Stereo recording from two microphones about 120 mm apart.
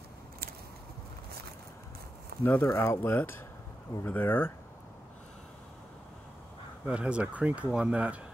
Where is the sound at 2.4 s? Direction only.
20° left (ahead or behind).